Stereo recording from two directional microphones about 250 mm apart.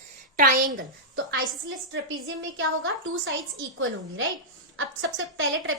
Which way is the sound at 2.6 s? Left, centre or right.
Right.